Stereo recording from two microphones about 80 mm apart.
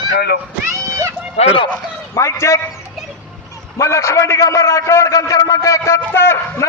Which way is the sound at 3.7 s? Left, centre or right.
Left.